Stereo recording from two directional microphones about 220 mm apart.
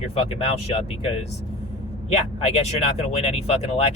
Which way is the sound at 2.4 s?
30° left (ahead or behind).